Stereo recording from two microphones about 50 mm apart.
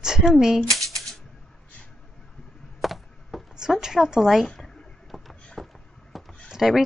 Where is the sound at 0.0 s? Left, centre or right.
Centre.